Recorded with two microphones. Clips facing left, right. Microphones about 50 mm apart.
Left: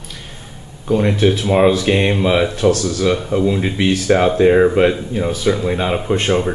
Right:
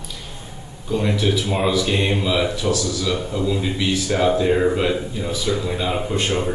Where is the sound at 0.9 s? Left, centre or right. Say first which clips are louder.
Left 6 dB; left.